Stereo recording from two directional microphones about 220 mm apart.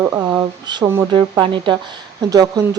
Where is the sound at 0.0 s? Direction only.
15° right (ahead or behind).